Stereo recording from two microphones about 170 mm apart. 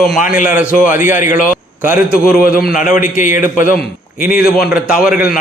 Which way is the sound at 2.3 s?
60° left (ahead or behind).